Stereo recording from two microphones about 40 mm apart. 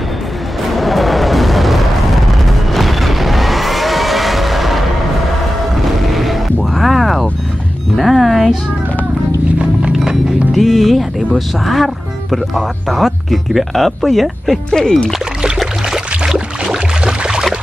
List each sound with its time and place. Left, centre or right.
0.7 s music: centre
9.6 s music: right
10.5 s speech: centre
16.6 s a sound: centre